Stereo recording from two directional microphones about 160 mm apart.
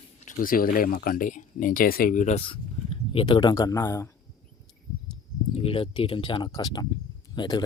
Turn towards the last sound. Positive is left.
turn(degrees=25)  # may be behind; listen again after turning